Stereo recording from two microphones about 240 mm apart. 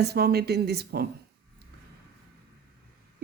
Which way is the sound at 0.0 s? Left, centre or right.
Right.